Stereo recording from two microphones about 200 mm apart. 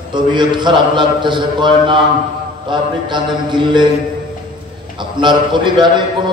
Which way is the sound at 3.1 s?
25° right (ahead or behind).